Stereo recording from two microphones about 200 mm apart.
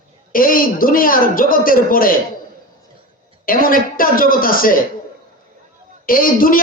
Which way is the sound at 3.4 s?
45° left (ahead or behind).